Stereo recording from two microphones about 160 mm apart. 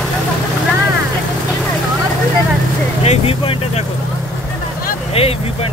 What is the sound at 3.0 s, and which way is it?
Vehicle, 40° left (ahead or behind).